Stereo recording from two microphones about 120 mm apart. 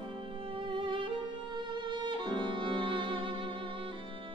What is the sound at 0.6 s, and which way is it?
Music, 45° right (ahead or behind).